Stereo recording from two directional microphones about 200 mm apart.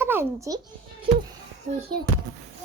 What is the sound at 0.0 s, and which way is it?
Speech, 10° right (ahead or behind).